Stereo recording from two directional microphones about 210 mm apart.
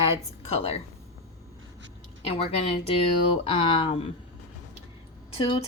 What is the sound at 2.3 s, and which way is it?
A woman's voice, 25° left (ahead or behind).